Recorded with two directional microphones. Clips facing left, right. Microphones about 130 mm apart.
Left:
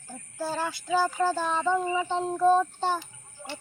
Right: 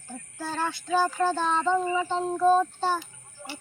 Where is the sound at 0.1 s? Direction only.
10° left (ahead or behind).